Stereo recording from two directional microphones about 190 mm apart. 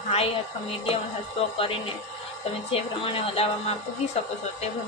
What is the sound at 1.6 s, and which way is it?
A woman's voice, 30° left (ahead or behind).